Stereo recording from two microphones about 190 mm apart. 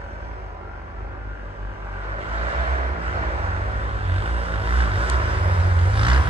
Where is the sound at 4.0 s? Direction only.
30° right (ahead or behind).